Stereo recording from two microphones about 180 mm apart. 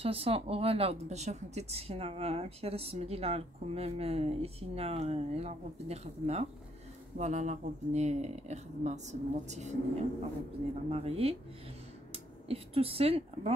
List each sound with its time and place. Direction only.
0.0 s speech: 35° right (ahead or behind)
10.9 s speech: 35° right (ahead or behind)